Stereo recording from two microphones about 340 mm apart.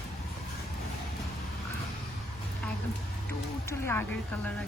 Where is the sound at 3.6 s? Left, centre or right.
Centre.